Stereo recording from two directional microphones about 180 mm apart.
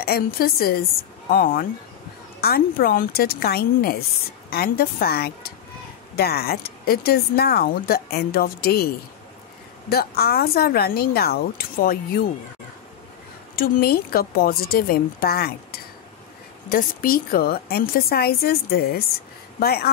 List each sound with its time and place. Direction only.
0.0 s speech: 60° left (ahead or behind)
13.6 s speech: 60° left (ahead or behind)